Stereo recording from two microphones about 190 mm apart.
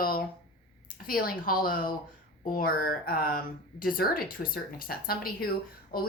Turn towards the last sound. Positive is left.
turn(degrees=50)  # may be behind; listen again after turning